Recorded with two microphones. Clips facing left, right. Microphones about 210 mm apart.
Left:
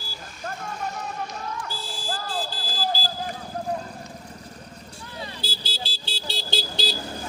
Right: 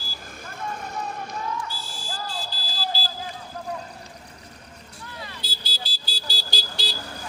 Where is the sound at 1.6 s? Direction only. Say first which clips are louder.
Left 3 dB; 55° left (ahead or behind).